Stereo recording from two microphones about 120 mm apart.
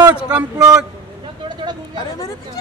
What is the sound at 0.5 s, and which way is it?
Speech, 30° right (ahead or behind).